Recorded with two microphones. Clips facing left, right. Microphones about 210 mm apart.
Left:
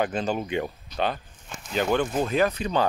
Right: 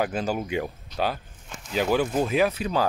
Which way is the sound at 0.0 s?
5° right (ahead or behind).